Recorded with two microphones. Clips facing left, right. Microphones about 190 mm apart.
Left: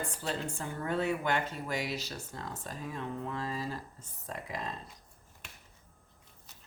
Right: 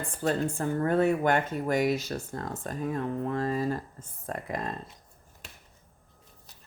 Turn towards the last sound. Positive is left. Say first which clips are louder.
# right 6 dB
turn(degrees=-50)  # may be behind; listen again after turning